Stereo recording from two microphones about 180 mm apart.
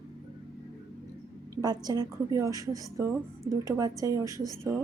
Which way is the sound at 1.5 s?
20° right (ahead or behind).